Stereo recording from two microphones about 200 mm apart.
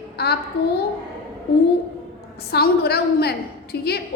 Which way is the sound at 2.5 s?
55° left (ahead or behind).